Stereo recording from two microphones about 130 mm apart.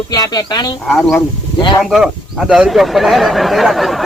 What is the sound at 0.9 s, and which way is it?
Speech, 10° left (ahead or behind).